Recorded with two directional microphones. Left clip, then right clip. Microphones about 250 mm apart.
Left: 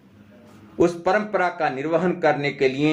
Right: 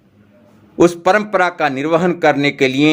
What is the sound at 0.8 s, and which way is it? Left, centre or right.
A man's voice, right.